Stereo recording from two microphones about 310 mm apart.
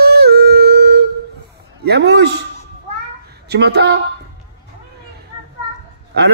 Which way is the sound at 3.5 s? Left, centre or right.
Right.